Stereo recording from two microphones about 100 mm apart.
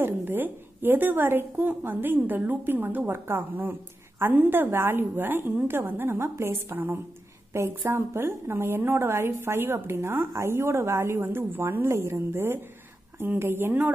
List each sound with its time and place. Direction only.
0.0 s a woman's voice: 20° right (ahead or behind)